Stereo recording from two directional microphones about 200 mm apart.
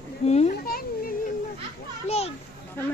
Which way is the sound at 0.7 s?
45° left (ahead or behind).